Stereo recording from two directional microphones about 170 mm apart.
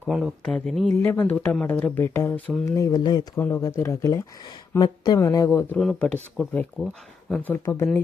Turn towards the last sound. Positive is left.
turn(degrees=15)  # may be behind; listen again after turning